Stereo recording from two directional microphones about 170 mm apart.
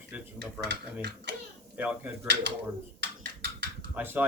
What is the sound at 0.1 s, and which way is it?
Dishes, 10° right (ahead or behind).